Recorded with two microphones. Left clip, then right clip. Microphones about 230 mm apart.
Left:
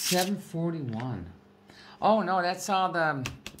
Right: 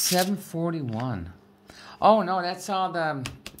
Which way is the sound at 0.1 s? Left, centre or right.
Right.